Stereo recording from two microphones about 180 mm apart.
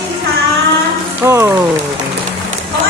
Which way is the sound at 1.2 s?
15° right (ahead or behind).